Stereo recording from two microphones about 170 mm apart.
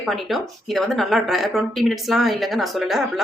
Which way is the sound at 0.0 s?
Centre (ahead or behind).